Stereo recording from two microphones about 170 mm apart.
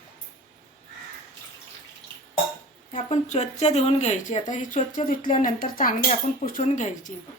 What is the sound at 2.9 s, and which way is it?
Speech, 45° left (ahead or behind).